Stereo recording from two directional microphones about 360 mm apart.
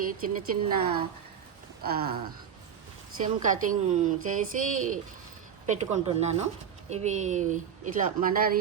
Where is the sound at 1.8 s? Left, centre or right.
Right.